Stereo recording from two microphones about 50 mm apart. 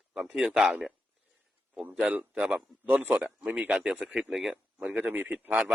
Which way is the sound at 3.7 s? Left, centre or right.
Centre.